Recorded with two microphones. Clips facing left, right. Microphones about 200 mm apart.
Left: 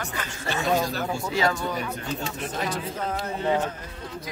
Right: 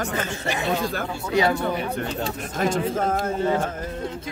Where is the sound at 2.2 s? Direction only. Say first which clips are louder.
Right 5 dB; 45° right (ahead or behind).